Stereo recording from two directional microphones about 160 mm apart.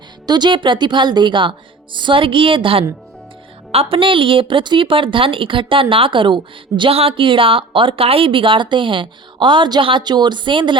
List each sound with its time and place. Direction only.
0.3 s a woman's voice: 25° right (ahead or behind)